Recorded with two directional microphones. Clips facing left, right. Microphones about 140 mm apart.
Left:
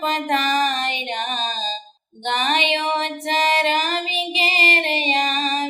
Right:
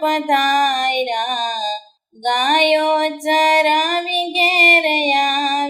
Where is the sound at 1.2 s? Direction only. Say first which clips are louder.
Right 5 dB; 15° right (ahead or behind).